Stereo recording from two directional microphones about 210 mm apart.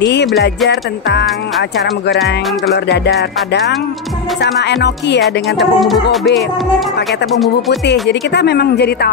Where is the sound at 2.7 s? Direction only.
55° left (ahead or behind).